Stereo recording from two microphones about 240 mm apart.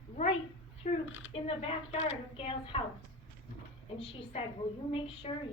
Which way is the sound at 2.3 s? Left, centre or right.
Left.